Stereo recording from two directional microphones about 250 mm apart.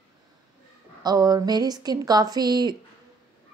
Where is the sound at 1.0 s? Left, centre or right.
Centre.